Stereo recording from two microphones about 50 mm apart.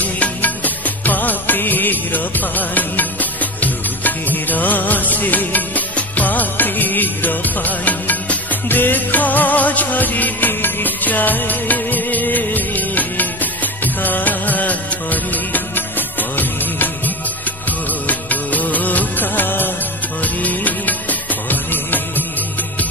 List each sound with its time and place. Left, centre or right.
0.0 s music: left
17.6 s music of bollywood: left